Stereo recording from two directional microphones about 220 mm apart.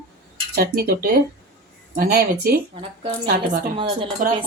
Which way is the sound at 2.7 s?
25° right (ahead or behind).